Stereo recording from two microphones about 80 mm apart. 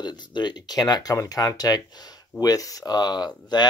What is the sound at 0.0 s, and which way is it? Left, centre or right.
Speech, left.